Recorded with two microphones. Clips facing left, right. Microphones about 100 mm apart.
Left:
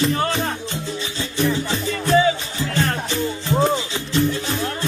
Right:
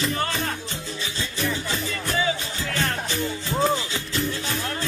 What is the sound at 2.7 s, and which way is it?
Music, 25° left (ahead or behind).